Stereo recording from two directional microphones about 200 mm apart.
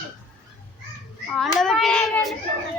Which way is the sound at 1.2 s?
5° left (ahead or behind).